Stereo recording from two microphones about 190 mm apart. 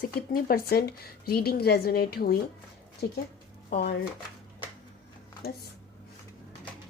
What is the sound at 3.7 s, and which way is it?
Speech, 55° left (ahead or behind).